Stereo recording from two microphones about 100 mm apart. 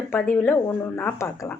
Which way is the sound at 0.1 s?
20° left (ahead or behind).